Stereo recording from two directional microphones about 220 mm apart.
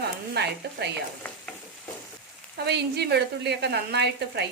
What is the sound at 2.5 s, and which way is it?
Speech, 50° right (ahead or behind).